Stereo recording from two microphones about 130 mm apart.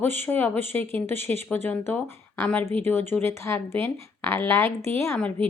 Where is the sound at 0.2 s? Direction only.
15° left (ahead or behind).